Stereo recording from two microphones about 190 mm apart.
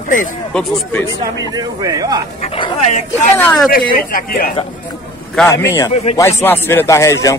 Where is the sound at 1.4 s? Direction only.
20° right (ahead or behind).